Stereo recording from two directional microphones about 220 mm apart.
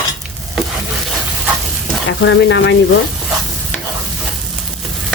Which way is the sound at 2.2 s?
55° left (ahead or behind).